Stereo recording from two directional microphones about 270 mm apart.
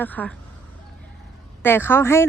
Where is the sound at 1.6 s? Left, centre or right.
Centre.